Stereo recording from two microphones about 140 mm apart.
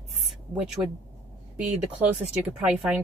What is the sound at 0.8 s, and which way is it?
Speech, 20° right (ahead or behind).